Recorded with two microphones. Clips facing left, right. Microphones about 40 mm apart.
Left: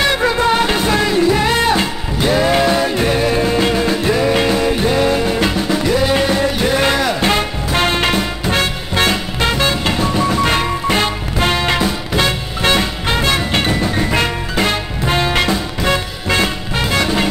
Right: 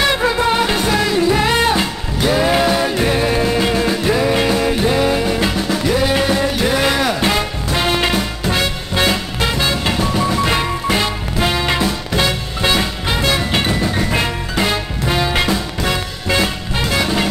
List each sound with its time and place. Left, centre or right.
0.0 s music: centre
7.3 s music: left
9.8 s music: centre
11.0 s music: left
11.7 s music: centre
12.3 s music: centre
15.0 s music: left
15.4 s music: centre